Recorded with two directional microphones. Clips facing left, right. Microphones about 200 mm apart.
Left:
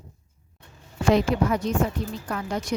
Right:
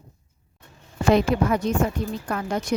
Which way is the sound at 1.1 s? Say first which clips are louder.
Right 2 dB; 55° right (ahead or behind).